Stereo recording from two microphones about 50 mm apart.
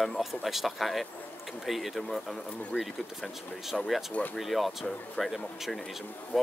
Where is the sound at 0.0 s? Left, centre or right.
Centre.